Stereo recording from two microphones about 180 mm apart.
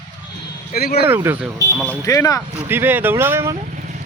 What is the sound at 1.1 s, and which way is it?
Speech, 10° right (ahead or behind).